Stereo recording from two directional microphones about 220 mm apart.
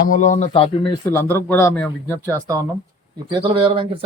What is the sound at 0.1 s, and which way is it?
Speech, 35° left (ahead or behind).